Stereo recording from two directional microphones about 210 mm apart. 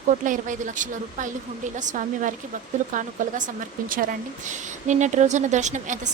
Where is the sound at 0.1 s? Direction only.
40° right (ahead or behind).